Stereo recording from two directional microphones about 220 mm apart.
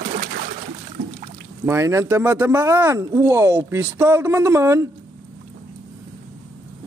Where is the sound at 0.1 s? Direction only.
45° right (ahead or behind).